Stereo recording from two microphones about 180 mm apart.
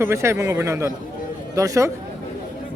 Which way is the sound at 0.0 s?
15° right (ahead or behind).